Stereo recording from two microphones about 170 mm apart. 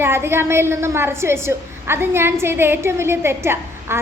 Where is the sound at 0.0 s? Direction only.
15° right (ahead or behind).